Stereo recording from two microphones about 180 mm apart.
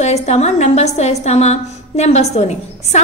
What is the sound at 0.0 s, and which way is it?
A woman's voice, 40° left (ahead or behind).